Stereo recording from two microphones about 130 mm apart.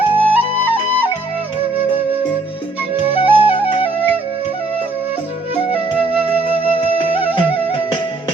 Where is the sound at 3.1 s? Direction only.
45° left (ahead or behind).